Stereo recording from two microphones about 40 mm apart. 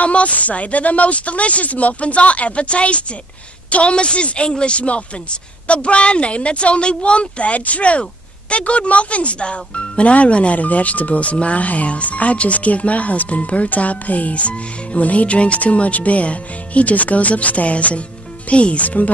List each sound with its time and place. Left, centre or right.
0.0 s speech: left